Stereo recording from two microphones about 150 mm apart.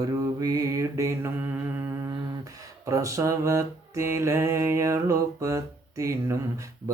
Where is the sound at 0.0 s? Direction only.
25° right (ahead or behind).